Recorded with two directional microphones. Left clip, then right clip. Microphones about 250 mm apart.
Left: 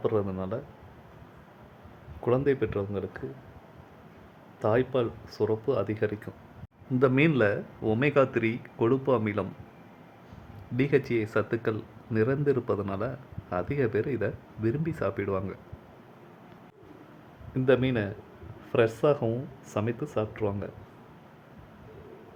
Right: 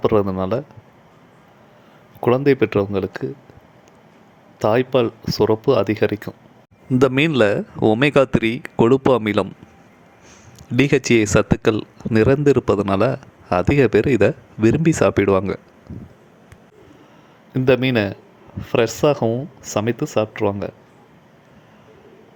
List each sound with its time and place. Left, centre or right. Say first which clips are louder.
0.0 s speech: right 11 dB; right
2.2 s speech: right 10 dB; right
4.6 s speech: right 9 dB; right
10.8 s speech: right 10 dB; right
17.5 s speech: right 8 dB; right